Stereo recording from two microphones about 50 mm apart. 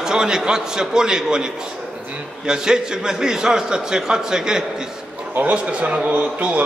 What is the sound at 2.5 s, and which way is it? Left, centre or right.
A man's voice, centre.